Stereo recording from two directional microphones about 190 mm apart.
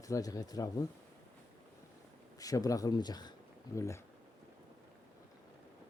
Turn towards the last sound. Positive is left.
turn(degrees=15)  # may be behind; listen again after turning